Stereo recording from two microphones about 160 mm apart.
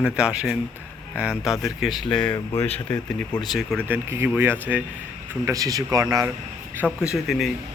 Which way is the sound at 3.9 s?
15° right (ahead or behind).